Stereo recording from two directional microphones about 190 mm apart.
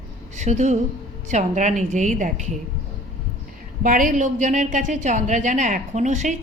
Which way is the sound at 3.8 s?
45° right (ahead or behind).